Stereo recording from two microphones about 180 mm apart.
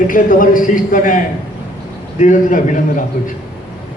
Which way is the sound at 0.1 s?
50° left (ahead or behind).